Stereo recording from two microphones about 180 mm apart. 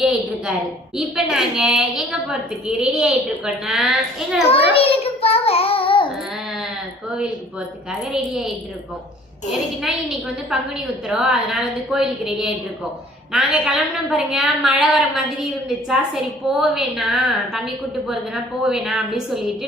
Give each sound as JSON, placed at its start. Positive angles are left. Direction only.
{"t": 0.0, "sound": "a sound", "side_deg": 0}
{"t": 0.9, "sound": "a woman's voice", "side_deg": -5}
{"t": 4.7, "sound": "child singing", "side_deg": 30}
{"t": 9.5, "sound": "a woman's voice", "side_deg": -5}
{"t": 16.5, "sound": "a woman's voice", "side_deg": 0}
{"t": 18.6, "sound": "a woman's voice", "side_deg": -5}